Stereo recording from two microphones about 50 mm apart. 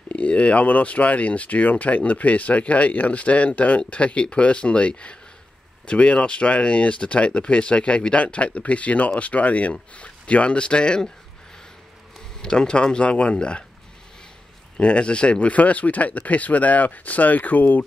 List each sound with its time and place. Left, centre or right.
0.1 s speech: left
12.4 s speech: centre
14.8 s speech: left